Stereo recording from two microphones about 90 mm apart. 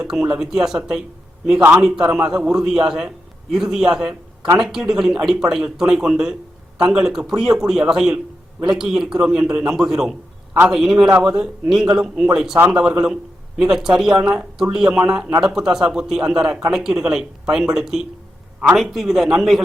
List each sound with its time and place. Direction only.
0.0 s a man's voice: 10° right (ahead or behind)